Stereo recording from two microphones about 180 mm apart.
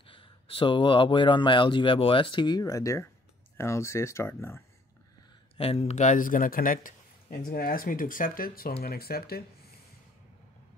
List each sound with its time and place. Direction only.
0.0 s speech: 30° left (ahead or behind); by 4.6 s 15° left (ahead or behind)
5.6 s a man's voice: 35° left (ahead or behind); by 9.4 s 60° left (ahead or behind)